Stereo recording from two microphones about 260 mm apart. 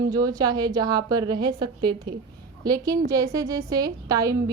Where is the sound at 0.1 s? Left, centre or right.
Centre.